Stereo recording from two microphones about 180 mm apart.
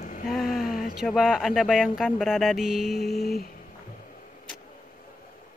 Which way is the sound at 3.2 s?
60° left (ahead or behind).